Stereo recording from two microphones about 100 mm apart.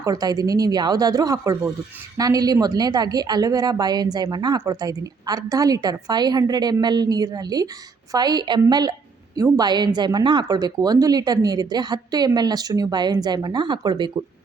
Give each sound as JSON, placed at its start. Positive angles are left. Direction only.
{"t": 0.0, "sound": "a woman's voice", "side_deg": -40}
{"t": 4.6, "sound": "a woman's voice", "side_deg": -35}